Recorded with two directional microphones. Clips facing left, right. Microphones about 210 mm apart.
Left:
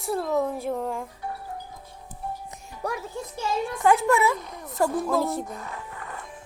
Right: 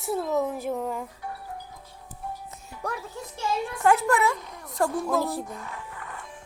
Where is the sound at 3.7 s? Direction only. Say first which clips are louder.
Left 1 dB; centre (ahead or behind).